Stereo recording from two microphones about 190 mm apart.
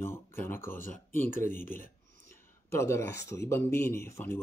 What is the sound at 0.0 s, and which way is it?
Speech, 10° left (ahead or behind).